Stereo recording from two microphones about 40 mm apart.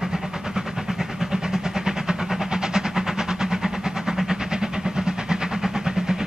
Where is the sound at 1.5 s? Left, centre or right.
Centre.